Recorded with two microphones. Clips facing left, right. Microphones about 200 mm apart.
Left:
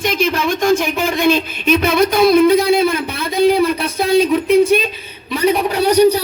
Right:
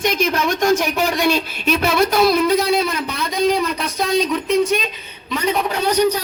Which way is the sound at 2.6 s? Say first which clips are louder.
Left 4 dB; 55° left (ahead or behind).